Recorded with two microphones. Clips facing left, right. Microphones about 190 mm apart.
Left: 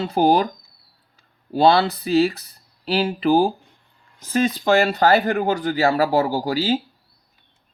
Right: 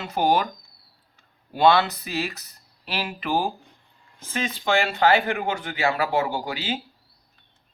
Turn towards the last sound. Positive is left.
turn(degrees=40)  # may be behind; listen again after turning